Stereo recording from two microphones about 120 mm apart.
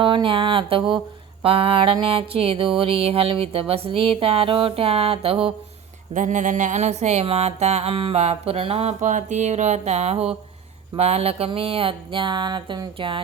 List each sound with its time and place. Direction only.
0.0 s mantra: 40° right (ahead or behind)
6.1 s music: 90° right; by 10.3 s 60° right (ahead or behind)
10.9 s mantra: 60° right (ahead or behind); by 13.2 s 45° right (ahead or behind)